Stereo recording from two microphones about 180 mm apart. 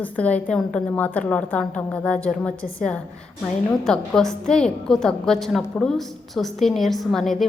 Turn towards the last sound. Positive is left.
turn(degrees=0)  # may be behind; listen again after turning